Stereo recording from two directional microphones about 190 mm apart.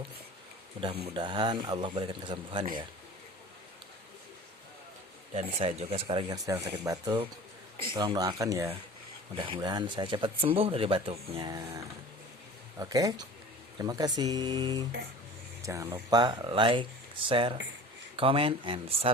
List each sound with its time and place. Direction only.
0.8 s speech: 30° right (ahead or behind)
5.3 s speech: 30° right (ahead or behind)